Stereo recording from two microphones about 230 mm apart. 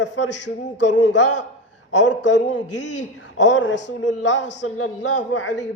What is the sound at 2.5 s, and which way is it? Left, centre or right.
Speech, left.